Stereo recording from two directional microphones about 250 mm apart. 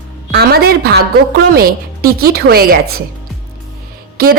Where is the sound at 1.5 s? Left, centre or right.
Right.